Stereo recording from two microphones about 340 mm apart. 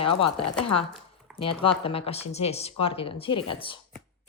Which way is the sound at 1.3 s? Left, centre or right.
Centre.